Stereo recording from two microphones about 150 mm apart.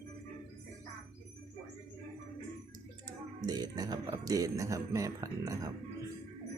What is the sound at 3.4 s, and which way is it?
Speech, 25° right (ahead or behind).